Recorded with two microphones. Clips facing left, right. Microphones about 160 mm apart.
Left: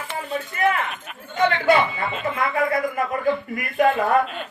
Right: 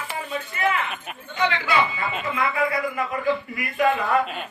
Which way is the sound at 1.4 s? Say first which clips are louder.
Left 4 dB; 50° left (ahead or behind).